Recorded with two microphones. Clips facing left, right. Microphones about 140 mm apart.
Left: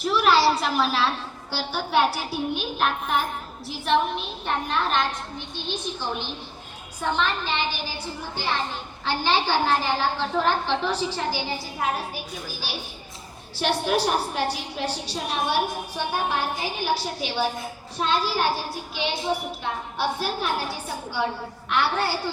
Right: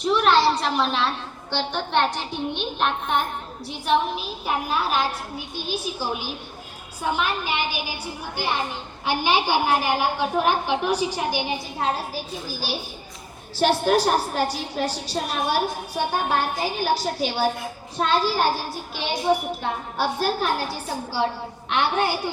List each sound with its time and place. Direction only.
0.0 s a woman's voice: centre (ahead or behind); by 21.2 s 35° right (ahead or behind)
21.7 s a woman's voice: 20° right (ahead or behind)